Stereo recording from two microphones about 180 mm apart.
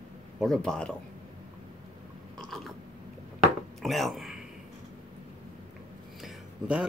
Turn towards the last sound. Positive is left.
turn(degrees=-5)  # may be behind; listen again after turning